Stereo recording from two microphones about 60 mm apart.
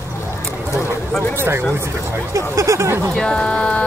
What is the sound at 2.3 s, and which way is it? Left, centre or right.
Speech, right.